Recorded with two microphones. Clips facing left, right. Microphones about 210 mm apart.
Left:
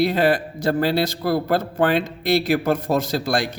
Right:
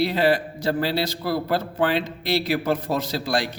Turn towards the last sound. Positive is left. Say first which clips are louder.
# left 3 dB
turn(degrees=50)  # may be behind; listen again after turning